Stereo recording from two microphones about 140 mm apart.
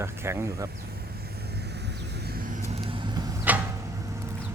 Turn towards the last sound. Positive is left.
turn(degrees=-10)  # may be behind; listen again after turning